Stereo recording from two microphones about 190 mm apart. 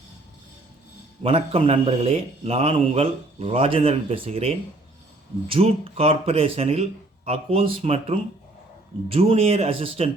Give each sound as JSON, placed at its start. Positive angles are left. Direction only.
{"t": 1.2, "sound": "a man's voice", "side_deg": -30}